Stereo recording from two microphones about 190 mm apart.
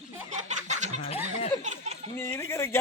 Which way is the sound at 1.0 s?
30° left (ahead or behind).